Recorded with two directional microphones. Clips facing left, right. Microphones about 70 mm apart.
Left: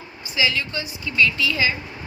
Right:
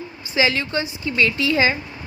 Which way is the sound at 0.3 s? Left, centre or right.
Right.